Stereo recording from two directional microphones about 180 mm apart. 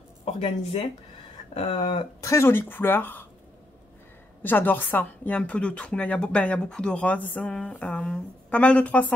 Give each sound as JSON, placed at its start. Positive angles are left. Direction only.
{"t": 0.2, "sound": "speech", "side_deg": 35}
{"t": 1.5, "sound": "a sound", "side_deg": 35}
{"t": 2.2, "sound": "speech", "side_deg": 15}
{"t": 4.4, "sound": "speech", "side_deg": 10}